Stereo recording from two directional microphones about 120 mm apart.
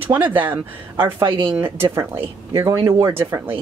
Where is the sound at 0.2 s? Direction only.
15° right (ahead or behind).